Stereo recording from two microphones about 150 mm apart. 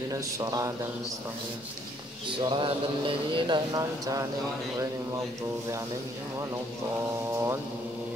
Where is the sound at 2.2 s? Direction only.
35° right (ahead or behind); by 7.5 s 15° right (ahead or behind).